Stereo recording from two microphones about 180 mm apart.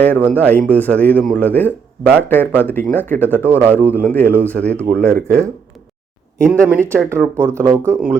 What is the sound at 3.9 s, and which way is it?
Speech, 10° left (ahead or behind).